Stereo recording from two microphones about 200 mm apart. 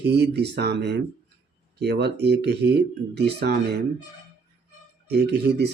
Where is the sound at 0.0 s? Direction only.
55° right (ahead or behind).